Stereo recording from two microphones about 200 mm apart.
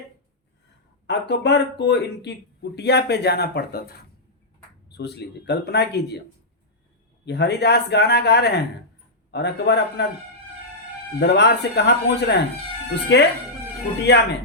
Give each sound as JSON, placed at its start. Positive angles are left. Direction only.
{"t": 1.0, "sound": "a man's voice", "side_deg": 60}
{"t": 7.3, "sound": "a man's voice", "side_deg": 55}
{"t": 11.2, "sound": "a man's voice", "side_deg": 60}